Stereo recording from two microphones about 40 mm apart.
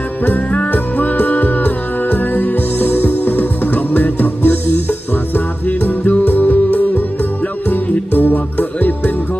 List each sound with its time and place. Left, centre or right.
0.3 s music: left
0.7 s music: left